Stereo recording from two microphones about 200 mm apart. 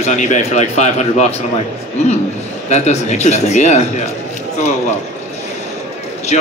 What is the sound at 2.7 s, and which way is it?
Speech, 35° left (ahead or behind).